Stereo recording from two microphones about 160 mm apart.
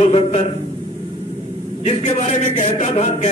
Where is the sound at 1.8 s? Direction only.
45° left (ahead or behind).